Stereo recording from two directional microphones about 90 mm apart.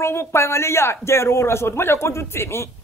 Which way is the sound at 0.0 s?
30° left (ahead or behind).